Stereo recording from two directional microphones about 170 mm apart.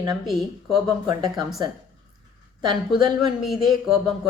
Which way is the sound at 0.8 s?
25° right (ahead or behind).